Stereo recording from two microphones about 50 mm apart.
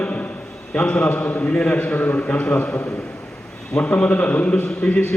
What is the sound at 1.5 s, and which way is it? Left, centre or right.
Speech, centre.